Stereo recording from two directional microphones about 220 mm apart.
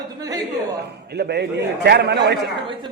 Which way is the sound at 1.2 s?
50° right (ahead or behind).